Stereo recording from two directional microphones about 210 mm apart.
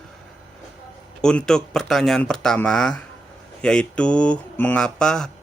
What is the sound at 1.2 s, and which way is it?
Speech, 5° left (ahead or behind).